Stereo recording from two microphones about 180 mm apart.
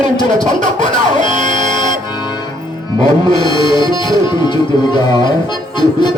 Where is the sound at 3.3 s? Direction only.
25° left (ahead or behind).